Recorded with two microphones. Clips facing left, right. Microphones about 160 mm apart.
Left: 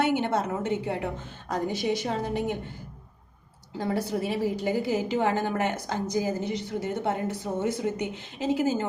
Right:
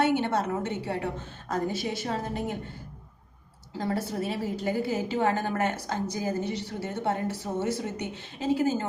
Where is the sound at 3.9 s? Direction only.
15° left (ahead or behind).